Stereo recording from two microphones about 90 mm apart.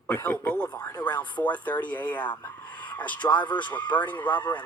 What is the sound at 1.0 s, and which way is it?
Speech, 15° left (ahead or behind).